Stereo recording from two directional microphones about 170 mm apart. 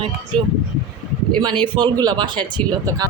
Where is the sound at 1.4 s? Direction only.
30° right (ahead or behind).